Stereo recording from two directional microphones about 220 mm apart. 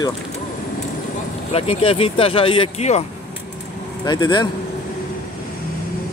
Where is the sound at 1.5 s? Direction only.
25° left (ahead or behind).